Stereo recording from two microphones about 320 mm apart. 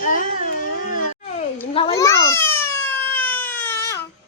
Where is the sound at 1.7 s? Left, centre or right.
Centre.